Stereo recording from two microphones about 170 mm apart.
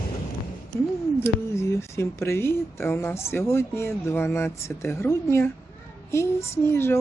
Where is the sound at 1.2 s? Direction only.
15° left (ahead or behind).